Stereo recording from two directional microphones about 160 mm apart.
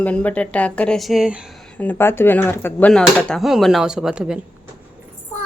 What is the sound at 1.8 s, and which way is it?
Speech, 15° left (ahead or behind).